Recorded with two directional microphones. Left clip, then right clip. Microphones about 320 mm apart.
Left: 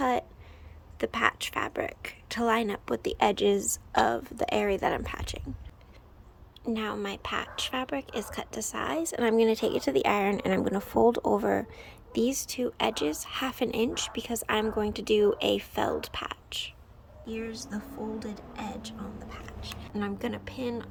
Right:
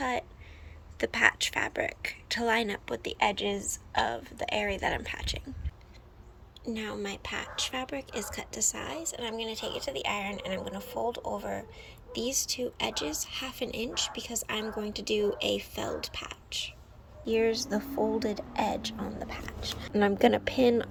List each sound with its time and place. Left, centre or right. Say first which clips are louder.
0.0 s a sound: left 4 dB; centre
0.9 s speech: right 2 dB; centre
6.7 s speech: left 3 dB; centre
17.2 s a woman's voice: right 10 dB; centre